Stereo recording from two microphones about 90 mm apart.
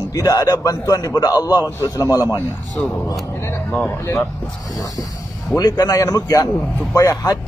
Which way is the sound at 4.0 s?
30° left (ahead or behind).